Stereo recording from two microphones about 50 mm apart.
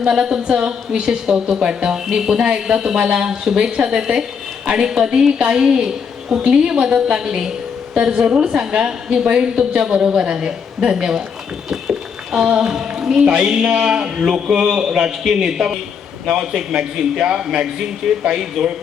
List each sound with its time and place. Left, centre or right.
0.1 s a woman's voice: centre
11.7 s a sound: centre
12.7 s a woman's voice: centre